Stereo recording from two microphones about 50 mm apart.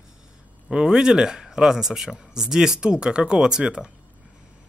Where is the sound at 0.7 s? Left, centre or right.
Centre.